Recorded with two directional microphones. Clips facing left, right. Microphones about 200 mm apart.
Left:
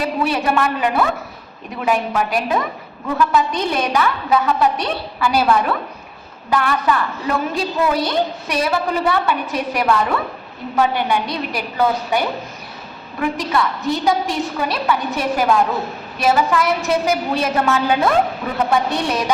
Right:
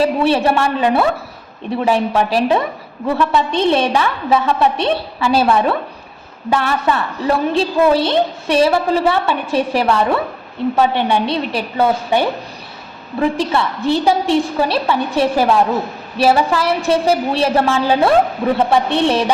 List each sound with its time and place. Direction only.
0.0 s a woman's voice: 30° right (ahead or behind)